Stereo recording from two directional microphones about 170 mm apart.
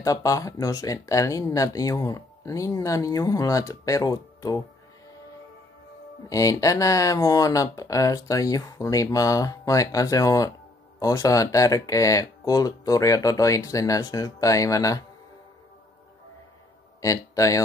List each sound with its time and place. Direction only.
0.0 s speech: 20° left (ahead or behind)
6.2 s speech: 20° left (ahead or behind)
17.0 s speech: 20° left (ahead or behind)